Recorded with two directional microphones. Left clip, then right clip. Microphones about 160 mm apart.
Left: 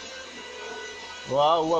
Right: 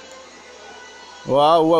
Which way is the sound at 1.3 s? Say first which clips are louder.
Right 7 dB; 65° right (ahead or behind).